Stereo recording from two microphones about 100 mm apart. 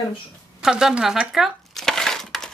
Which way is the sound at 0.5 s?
5° right (ahead or behind).